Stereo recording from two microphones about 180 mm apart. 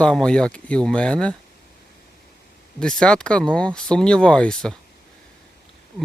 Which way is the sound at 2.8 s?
5° left (ahead or behind).